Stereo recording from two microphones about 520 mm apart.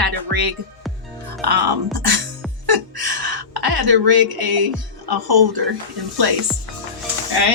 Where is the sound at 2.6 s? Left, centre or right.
Right.